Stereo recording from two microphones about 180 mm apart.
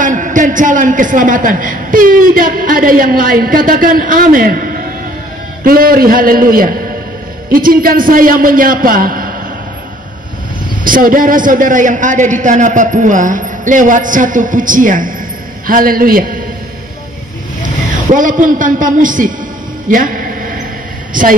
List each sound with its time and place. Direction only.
0.0 s a woman's voice: 45° right (ahead or behind)
10.8 s a woman's voice: 50° right (ahead or behind)
18.1 s a woman's voice: 45° right (ahead or behind)
19.9 s a sound: 50° right (ahead or behind)
21.1 s speech: 50° right (ahead or behind)